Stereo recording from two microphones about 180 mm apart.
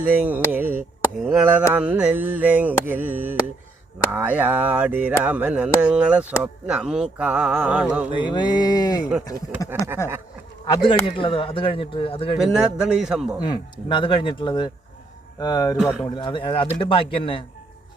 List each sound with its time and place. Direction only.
0.0 s a sound: 10° right (ahead or behind)
8.1 s speech: 25° left (ahead or behind)
11.0 s speech: 30° left (ahead or behind)
12.4 s a man's voice: 5° right (ahead or behind)
13.4 s speech: 25° left (ahead or behind)
15.8 s a man's voice: 5° right (ahead or behind)
16.0 s speech: 25° left (ahead or behind)